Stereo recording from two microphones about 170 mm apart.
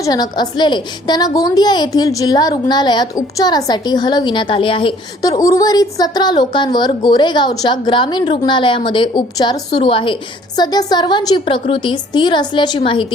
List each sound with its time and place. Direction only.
0.0 s a woman's voice: 25° left (ahead or behind)